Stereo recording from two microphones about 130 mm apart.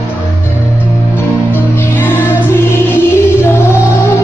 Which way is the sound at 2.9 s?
20° left (ahead or behind).